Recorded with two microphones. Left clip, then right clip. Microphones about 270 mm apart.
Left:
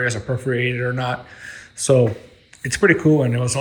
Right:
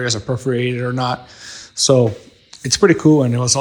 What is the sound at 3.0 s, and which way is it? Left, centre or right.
Speech, right.